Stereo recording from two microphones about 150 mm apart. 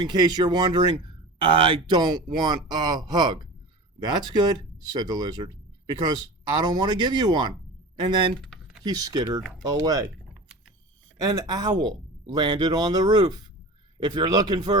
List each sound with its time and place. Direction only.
0.0 s speech: 30° right (ahead or behind)
11.2 s speech: 25° right (ahead or behind)